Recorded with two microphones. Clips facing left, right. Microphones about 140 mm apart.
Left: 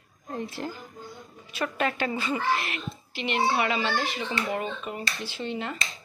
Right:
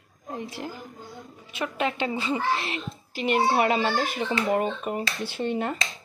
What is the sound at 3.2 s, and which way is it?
A child's voice, 45° right (ahead or behind).